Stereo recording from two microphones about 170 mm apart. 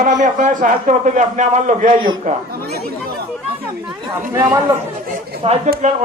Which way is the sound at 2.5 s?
65° right (ahead or behind).